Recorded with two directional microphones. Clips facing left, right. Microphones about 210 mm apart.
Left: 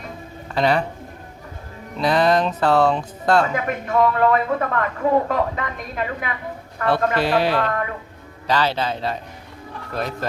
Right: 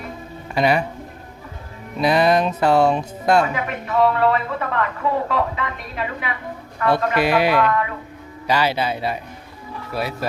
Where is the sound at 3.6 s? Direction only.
45° left (ahead or behind).